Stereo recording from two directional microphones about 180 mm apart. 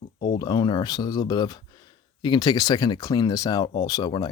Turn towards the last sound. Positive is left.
turn(degrees=20)  # may be behind; listen again after turning